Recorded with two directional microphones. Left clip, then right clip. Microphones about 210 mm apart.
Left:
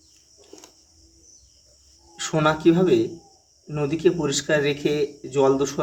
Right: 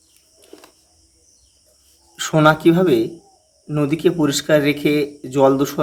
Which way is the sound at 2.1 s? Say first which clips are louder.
Right 7 dB; 30° right (ahead or behind).